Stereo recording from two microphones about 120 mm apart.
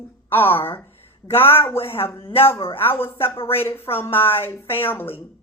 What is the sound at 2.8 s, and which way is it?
Speech, 20° left (ahead or behind).